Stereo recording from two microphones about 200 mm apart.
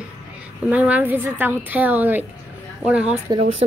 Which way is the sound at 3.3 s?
30° right (ahead or behind).